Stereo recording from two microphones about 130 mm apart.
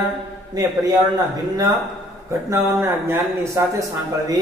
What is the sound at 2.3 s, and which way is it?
A man's voice, 20° right (ahead or behind).